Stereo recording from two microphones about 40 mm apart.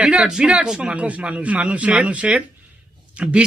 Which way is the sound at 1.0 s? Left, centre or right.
Right.